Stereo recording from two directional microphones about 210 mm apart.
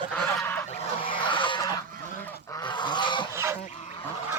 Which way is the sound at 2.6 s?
20° left (ahead or behind).